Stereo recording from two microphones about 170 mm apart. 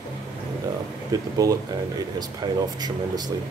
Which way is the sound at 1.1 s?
20° right (ahead or behind).